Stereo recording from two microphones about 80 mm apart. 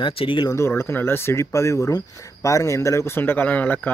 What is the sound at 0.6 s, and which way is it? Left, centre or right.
Speech, left.